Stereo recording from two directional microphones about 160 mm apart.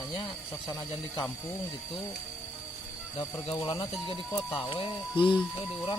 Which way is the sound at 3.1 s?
30° left (ahead or behind).